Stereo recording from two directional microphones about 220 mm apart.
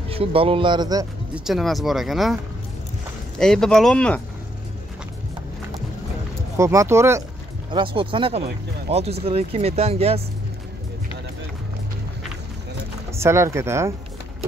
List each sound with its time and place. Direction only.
0.1 s speech: 25° right (ahead or behind)
1.3 s speech: centre (ahead or behind)
3.3 s speech: centre (ahead or behind)
6.5 s speech: 15° right (ahead or behind)
7.7 s speech: 25° right (ahead or behind)
13.1 s speech: 10° right (ahead or behind)